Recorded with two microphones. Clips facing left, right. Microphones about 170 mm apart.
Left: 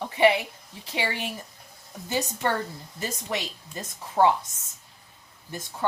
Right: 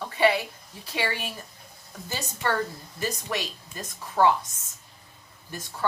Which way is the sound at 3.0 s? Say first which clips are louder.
Right 1 dB; 20° left (ahead or behind).